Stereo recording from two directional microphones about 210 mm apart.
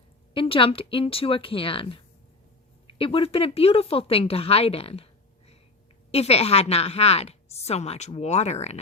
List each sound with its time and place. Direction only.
0.3 s a woman's voice: 25° left (ahead or behind)
6.1 s a woman's voice: 30° left (ahead or behind)